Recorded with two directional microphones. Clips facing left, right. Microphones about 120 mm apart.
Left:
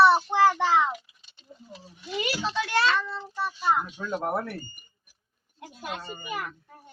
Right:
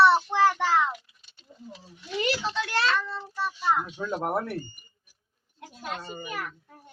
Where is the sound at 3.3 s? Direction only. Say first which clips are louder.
Left 1 dB; 10° left (ahead or behind).